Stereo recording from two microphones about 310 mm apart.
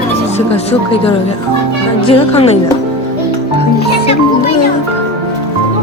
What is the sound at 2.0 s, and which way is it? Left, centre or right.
Speech, centre.